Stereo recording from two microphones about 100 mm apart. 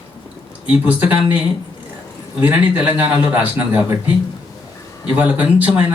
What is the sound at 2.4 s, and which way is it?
A man's voice, 15° right (ahead or behind).